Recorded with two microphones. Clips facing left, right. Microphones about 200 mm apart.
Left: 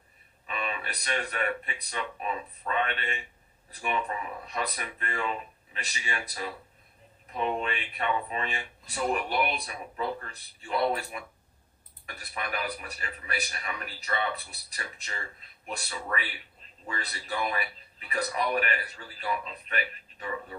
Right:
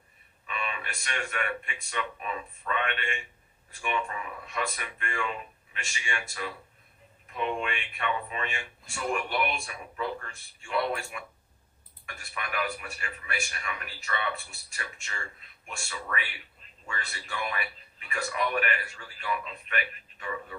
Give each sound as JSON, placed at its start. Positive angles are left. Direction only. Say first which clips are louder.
{"t": 0.5, "sound": "a man's voice", "louder": "left 2 dB", "side_deg": 35}